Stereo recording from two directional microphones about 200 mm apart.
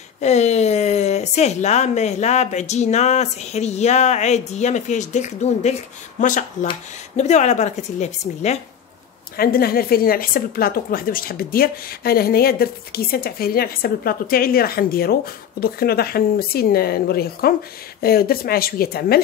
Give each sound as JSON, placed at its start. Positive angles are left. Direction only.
{"t": 0.2, "sound": "speech", "side_deg": 35}
{"t": 9.4, "sound": "a woman's voice", "side_deg": 50}